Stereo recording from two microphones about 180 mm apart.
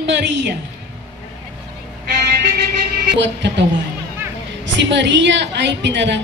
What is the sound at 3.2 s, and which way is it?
Speech, 75° right (ahead or behind).